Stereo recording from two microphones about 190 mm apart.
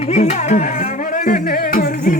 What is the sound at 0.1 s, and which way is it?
Music, 35° left (ahead or behind).